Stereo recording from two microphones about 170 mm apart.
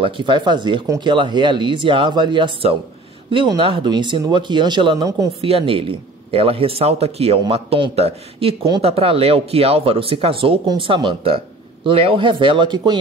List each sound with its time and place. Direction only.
0.0 s speech: 25° right (ahead or behind)
5.4 s speech: 35° right (ahead or behind)